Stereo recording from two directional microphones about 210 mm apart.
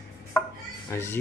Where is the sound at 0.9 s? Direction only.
10° left (ahead or behind).